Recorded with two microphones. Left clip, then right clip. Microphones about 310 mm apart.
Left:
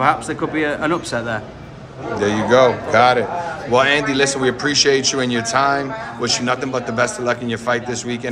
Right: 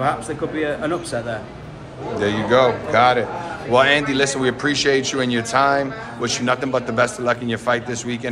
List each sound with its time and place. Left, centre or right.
0.6 s speech: left
2.1 s a man's voice: centre